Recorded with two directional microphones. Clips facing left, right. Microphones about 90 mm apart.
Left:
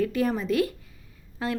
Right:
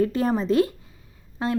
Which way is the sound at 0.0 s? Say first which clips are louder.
Right 3 dB; 30° right (ahead or behind).